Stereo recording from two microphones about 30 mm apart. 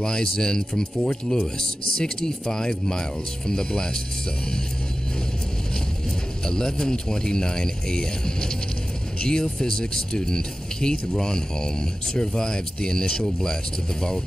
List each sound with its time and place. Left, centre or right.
0.0 s speech: left
6.4 s speech: left